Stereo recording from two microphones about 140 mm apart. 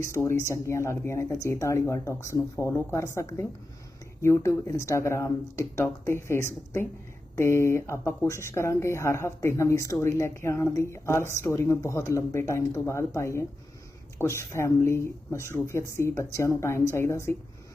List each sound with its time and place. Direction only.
0.0 s speech: 20° left (ahead or behind)